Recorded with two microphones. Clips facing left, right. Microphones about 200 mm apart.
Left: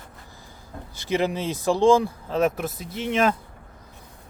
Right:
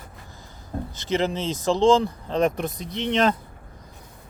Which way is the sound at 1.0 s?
15° left (ahead or behind).